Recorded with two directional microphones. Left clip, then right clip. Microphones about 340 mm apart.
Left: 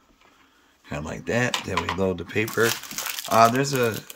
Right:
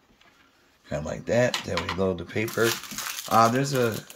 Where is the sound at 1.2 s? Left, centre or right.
Left.